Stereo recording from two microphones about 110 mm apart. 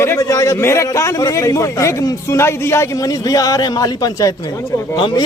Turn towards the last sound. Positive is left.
turn(degrees=40)  # may be behind; listen again after turning